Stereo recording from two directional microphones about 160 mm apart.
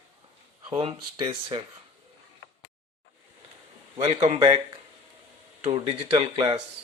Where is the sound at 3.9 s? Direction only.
40° right (ahead or behind).